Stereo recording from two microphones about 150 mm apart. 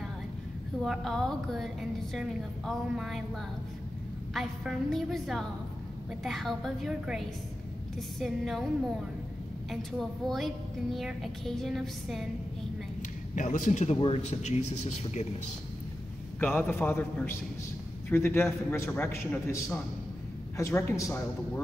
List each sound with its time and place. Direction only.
0.8 s a woman's voice: centre (ahead or behind)
4.3 s a woman's voice: centre (ahead or behind)
9.7 s a woman's voice: centre (ahead or behind)
13.3 s a man's voice: 55° left (ahead or behind)
13.9 s speech: 35° left (ahead or behind)
14.2 s speech: 50° left (ahead or behind)
16.3 s a man's voice: 10° left (ahead or behind)